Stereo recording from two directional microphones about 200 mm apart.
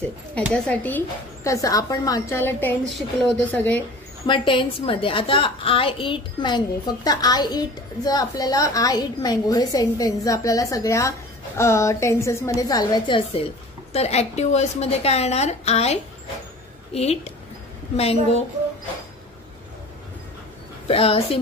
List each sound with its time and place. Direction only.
0.5 s speech: 5° left (ahead or behind)
4.3 s a woman's voice: 25° left (ahead or behind)
13.9 s a woman's voice: 30° left (ahead or behind)
20.8 s a woman's voice: 30° left (ahead or behind)